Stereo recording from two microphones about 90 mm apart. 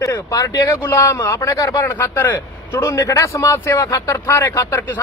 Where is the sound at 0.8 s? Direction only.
25° left (ahead or behind).